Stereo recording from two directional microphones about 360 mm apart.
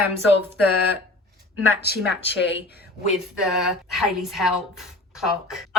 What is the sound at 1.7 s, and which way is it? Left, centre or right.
Speech, left.